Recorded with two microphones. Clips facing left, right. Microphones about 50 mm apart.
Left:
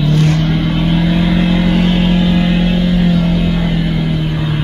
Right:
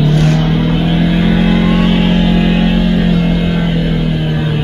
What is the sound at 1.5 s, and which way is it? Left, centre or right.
Vehicle, centre.